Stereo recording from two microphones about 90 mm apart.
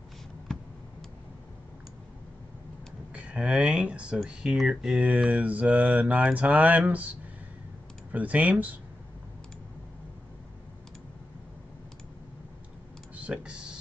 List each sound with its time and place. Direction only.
3.1 s speech: 15° right (ahead or behind)
13.1 s computer keyboard: 15° right (ahead or behind)